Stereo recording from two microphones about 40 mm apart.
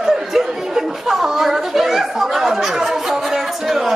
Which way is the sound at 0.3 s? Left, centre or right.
Centre.